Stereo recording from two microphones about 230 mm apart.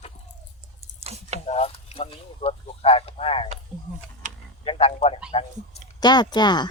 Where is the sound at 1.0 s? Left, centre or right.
Right.